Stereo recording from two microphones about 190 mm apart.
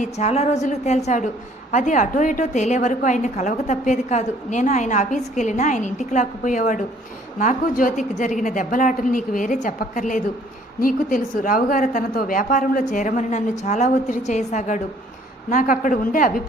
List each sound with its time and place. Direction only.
0.0 s a woman's voice: 35° left (ahead or behind)